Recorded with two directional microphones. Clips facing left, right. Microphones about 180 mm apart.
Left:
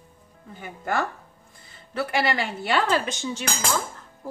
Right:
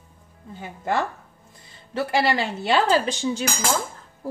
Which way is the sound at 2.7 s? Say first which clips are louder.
Right 4 dB; 35° right (ahead or behind).